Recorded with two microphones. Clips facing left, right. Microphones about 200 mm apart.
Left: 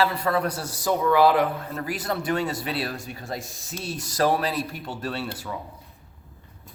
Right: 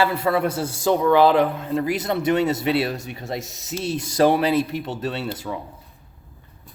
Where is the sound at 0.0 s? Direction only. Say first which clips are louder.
Right 3 dB; 25° right (ahead or behind).